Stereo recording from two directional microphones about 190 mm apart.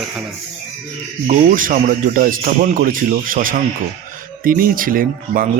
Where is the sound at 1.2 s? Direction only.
40° right (ahead or behind).